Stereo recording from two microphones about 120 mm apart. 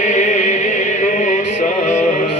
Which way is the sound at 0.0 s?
90° left.